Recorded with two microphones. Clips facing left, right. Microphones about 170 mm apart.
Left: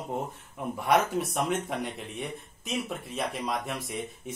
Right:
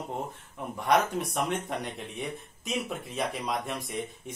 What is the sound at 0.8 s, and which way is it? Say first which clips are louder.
A man's voice: even; 5° left (ahead or behind).